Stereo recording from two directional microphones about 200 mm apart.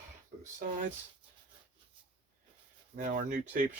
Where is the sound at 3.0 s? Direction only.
40° right (ahead or behind).